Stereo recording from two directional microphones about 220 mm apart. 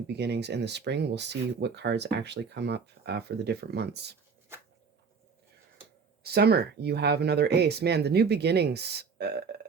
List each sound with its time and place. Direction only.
0.1 s speech: 50° right (ahead or behind)
6.2 s speech: 45° right (ahead or behind)